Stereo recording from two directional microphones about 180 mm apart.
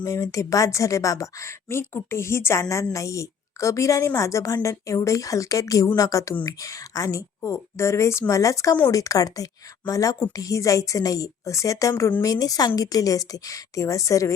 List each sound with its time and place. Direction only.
0.0 s a woman's voice: 15° left (ahead or behind)